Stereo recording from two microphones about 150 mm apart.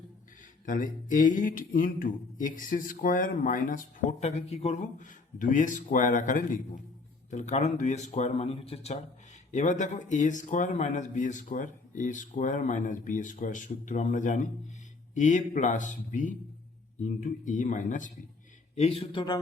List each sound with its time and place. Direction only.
0.6 s a man's voice: 65° left (ahead or behind)
4.2 s a man's voice: 50° left (ahead or behind)
9.5 s a man's voice: 55° left (ahead or behind)
18.8 s a man's voice: 40° left (ahead or behind)